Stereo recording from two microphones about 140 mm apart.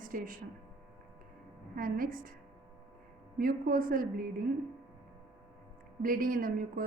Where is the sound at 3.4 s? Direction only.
90° right.